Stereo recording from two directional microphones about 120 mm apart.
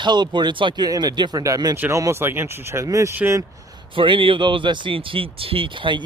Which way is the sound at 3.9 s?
45° right (ahead or behind).